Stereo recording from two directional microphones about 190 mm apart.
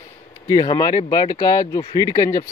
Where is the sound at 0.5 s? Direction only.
20° left (ahead or behind).